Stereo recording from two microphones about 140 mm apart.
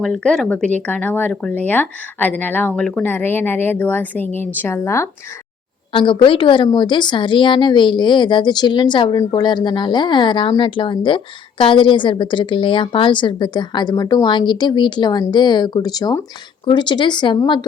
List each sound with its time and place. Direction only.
0.0 s speech: 5° left (ahead or behind)
5.9 s a woman's voice: 35° left (ahead or behind)